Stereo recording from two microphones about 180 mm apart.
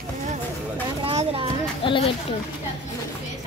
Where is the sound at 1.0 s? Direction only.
30° right (ahead or behind).